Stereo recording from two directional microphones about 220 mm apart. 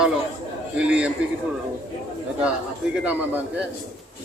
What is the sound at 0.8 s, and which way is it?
Speech, 5° right (ahead or behind).